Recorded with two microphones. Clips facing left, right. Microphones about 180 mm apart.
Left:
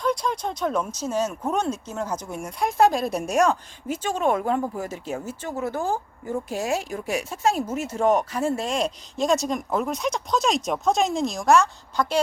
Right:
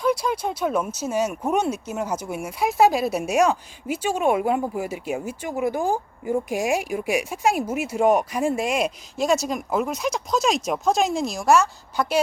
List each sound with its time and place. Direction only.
0.0 s speech: 5° right (ahead or behind)